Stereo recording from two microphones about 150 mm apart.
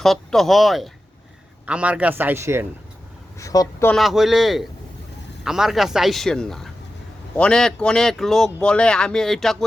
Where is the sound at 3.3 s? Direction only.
20° left (ahead or behind).